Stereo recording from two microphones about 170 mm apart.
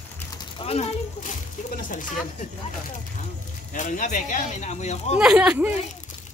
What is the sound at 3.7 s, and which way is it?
Speech, 50° left (ahead or behind).